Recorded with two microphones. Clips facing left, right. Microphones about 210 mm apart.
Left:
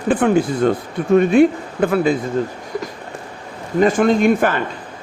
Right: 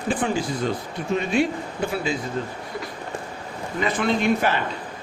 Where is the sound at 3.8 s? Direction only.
45° left (ahead or behind).